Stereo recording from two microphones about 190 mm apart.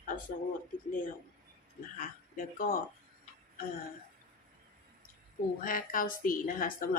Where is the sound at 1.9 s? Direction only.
45° left (ahead or behind).